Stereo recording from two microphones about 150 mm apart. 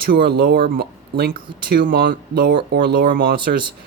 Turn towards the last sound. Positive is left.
turn(degrees=-90)